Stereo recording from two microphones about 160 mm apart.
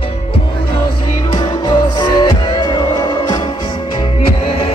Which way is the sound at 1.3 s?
30° left (ahead or behind).